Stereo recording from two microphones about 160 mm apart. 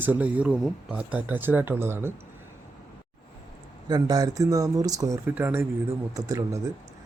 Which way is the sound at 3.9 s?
25° right (ahead or behind).